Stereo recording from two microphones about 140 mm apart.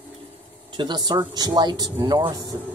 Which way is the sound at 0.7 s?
30° right (ahead or behind).